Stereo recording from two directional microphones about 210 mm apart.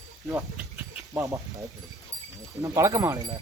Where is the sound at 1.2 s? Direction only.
15° right (ahead or behind).